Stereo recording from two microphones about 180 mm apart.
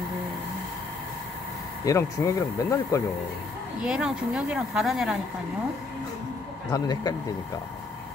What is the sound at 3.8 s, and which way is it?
A woman's voice, 5° right (ahead or behind).